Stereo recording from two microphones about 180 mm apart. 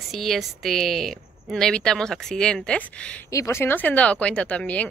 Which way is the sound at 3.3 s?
15° left (ahead or behind).